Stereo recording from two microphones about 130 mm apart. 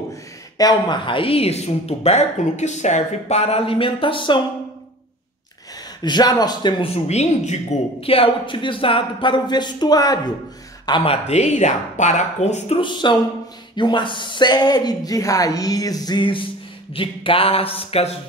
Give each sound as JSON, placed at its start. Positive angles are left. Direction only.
{"t": 0.1, "sound": "a woman's voice", "side_deg": 30}
{"t": 6.0, "sound": "speech", "side_deg": 30}
{"t": 6.8, "sound": "speech", "side_deg": 55}
{"t": 8.0, "sound": "speech", "side_deg": 45}
{"t": 10.9, "sound": "speech", "side_deg": 45}
{"t": 12.7, "sound": "a woman's voice", "side_deg": 35}